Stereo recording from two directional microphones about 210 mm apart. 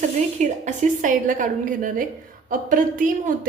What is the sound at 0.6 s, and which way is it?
A woman's voice, 35° right (ahead or behind).